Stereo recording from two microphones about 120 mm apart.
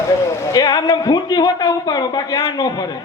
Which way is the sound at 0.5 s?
35° left (ahead or behind).